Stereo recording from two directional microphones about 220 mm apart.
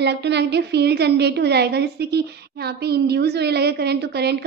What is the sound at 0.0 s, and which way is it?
A woman's voice, 50° right (ahead or behind).